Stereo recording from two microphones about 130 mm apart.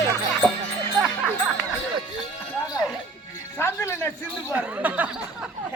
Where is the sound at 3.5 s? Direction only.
20° left (ahead or behind).